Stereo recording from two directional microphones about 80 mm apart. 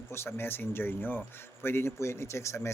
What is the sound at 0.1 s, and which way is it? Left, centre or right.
A man's voice, left.